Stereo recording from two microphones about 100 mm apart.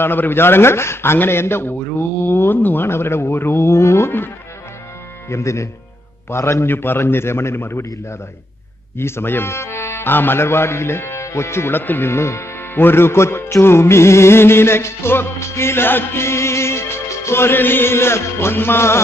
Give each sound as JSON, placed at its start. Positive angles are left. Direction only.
{"t": 0.0, "sound": "a man's voice", "side_deg": 20}
{"t": 5.3, "sound": "a man's voice", "side_deg": 30}
{"t": 8.9, "sound": "a man's voice", "side_deg": 25}